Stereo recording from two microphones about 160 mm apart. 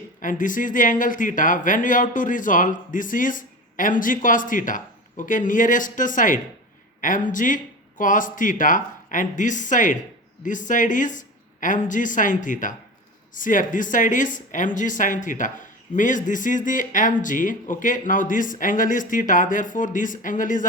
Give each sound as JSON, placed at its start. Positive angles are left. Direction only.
{"t": 0.2, "sound": "speech", "side_deg": 55}